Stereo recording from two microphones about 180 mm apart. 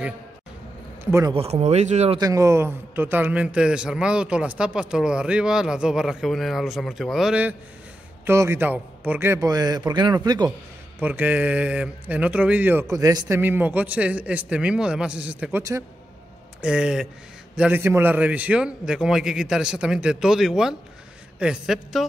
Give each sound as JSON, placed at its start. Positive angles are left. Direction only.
{"t": 1.3, "sound": "speech", "side_deg": -35}
{"t": 2.1, "sound": "a man's voice", "side_deg": -20}
{"t": 11.0, "sound": "speech", "side_deg": -10}
{"t": 16.6, "sound": "a man's voice", "side_deg": -5}